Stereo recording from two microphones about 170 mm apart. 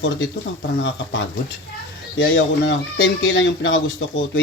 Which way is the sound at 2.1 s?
90° left.